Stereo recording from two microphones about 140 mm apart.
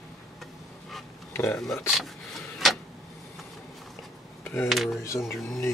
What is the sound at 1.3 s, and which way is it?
Speech, 20° left (ahead or behind).